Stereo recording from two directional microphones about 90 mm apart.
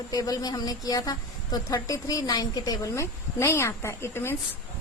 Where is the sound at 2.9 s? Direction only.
30° left (ahead or behind).